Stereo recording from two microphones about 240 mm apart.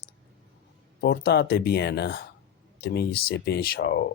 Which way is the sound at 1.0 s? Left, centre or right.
Left.